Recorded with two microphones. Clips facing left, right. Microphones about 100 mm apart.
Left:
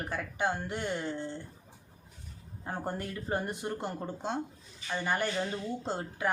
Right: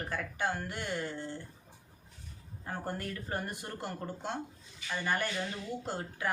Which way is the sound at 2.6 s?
20° left (ahead or behind).